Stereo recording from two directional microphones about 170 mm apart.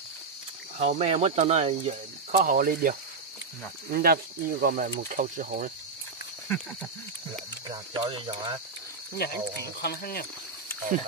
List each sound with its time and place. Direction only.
0.7 s speech: 40° right (ahead or behind)
2.4 s speech: 55° right (ahead or behind)
7.6 s speech: 25° right (ahead or behind)
9.1 s speech: 65° left (ahead or behind)
10.9 s speech: 50° right (ahead or behind)